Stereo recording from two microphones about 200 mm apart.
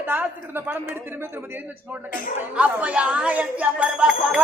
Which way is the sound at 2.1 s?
45° left (ahead or behind).